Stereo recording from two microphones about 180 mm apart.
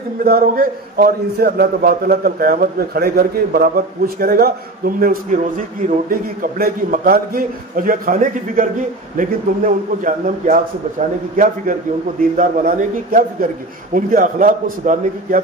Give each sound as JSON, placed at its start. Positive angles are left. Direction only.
{"t": 0.2, "sound": "a man's voice", "side_deg": -55}